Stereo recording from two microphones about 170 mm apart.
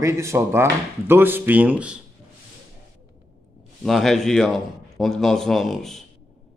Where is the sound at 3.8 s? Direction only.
Centre (ahead or behind).